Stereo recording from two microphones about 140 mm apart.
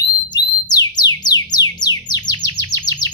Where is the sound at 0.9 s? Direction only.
30° left (ahead or behind).